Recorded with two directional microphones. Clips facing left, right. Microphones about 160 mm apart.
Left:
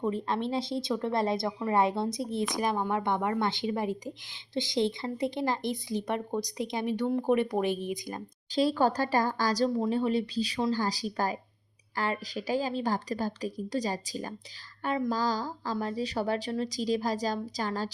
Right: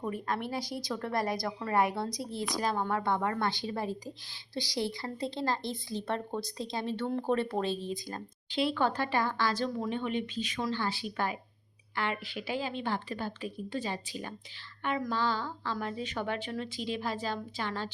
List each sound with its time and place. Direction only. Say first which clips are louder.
0.0 s a woman's voice: left 4 dB; 25° left (ahead or behind)
8.4 s a woman's voice: left 4 dB; 40° left (ahead or behind)